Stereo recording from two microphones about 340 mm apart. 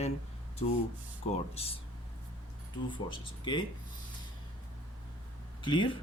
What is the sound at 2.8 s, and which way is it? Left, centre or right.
Speech, centre.